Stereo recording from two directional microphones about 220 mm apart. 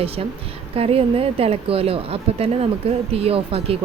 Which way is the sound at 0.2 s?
30° right (ahead or behind).